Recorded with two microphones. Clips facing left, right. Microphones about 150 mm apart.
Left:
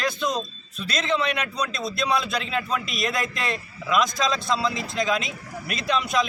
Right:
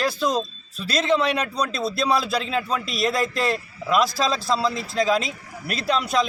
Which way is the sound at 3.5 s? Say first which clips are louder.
Right 3 dB; 35° right (ahead or behind).